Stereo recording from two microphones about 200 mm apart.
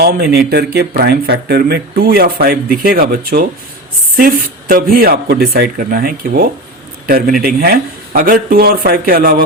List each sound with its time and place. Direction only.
0.0 s speech: 50° right (ahead or behind)